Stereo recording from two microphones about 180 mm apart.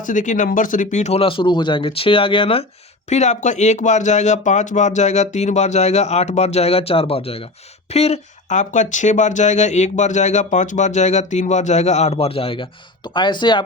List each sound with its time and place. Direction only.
0.0 s speech: 45° left (ahead or behind); by 13.6 s 25° left (ahead or behind)